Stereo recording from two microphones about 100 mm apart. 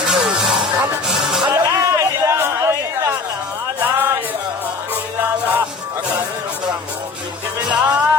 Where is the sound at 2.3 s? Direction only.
30° right (ahead or behind).